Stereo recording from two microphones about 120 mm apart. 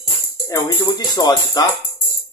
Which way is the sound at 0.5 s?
30° left (ahead or behind).